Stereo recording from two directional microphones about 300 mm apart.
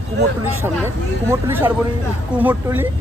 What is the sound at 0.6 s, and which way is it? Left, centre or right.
Speech, centre.